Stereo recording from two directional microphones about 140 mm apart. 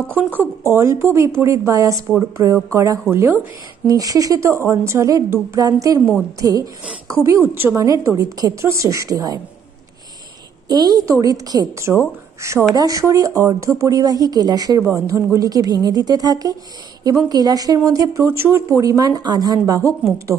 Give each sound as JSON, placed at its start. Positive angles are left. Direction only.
{"t": 0.1, "sound": "a woman's voice", "side_deg": -15}
{"t": 10.7, "sound": "a woman's voice", "side_deg": -30}